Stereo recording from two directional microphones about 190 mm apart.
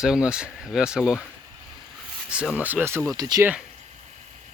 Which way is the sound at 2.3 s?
5° right (ahead or behind).